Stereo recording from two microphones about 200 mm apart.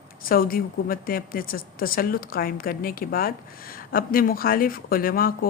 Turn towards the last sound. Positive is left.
turn(degrees=45)  # may be behind; listen again after turning